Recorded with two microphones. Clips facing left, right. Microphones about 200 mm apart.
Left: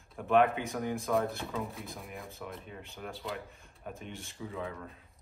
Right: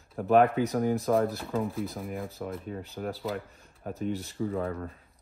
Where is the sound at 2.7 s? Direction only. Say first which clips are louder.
Right 8 dB; 45° right (ahead or behind).